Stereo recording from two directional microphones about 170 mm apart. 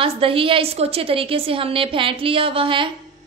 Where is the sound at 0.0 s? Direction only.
30° right (ahead or behind).